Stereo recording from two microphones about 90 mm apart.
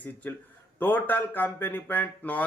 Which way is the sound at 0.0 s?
20° left (ahead or behind).